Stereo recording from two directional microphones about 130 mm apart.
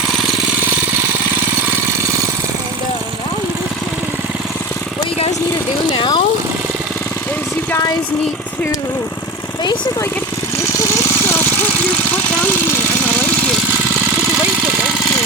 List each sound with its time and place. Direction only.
5.9 s vehicle: 40° left (ahead or behind)